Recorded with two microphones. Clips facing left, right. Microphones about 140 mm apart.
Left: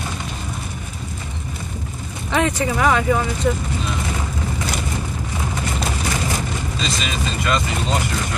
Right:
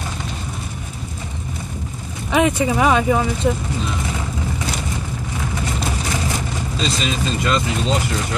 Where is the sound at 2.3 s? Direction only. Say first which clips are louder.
Right 3 dB; 15° right (ahead or behind).